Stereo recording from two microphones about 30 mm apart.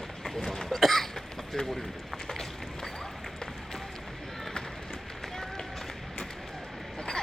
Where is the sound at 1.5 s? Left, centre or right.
Centre.